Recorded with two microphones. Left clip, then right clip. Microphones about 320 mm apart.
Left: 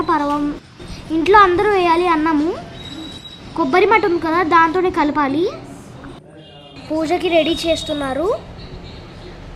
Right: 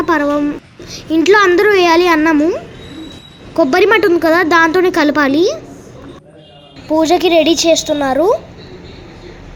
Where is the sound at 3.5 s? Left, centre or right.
Centre.